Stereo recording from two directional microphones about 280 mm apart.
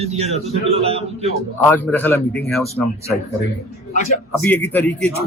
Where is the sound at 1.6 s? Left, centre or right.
Centre.